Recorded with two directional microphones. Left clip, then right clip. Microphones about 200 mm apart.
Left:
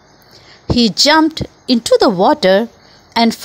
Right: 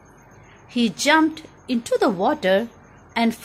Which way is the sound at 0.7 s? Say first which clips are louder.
Left 7 dB; 45° left (ahead or behind).